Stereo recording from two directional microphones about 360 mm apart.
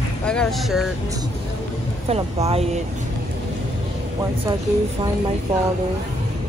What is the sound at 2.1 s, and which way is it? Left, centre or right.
Speech, centre.